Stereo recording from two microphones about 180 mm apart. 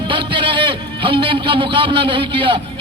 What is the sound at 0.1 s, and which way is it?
A man's voice, 25° right (ahead or behind).